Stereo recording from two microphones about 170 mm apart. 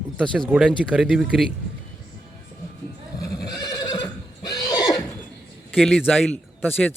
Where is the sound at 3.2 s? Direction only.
20° left (ahead or behind).